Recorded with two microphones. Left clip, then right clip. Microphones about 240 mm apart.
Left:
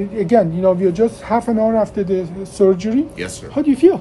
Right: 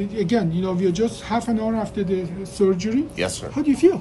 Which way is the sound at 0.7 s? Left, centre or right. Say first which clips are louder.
Left 6 dB; left.